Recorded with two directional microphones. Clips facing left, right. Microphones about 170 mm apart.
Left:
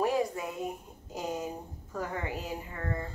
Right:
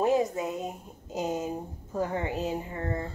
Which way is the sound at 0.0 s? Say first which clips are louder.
Right 4 dB; 20° right (ahead or behind).